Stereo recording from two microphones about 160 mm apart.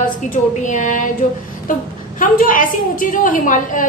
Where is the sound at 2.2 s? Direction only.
55° left (ahead or behind).